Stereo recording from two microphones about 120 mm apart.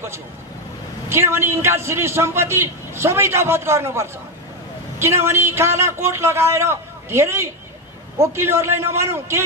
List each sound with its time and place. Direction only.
1.0 s a man's voice: 20° right (ahead or behind)